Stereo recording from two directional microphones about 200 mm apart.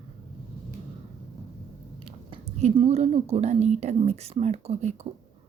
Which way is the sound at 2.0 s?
25° right (ahead or behind).